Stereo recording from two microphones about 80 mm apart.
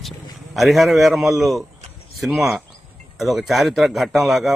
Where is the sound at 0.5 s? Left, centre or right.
Centre.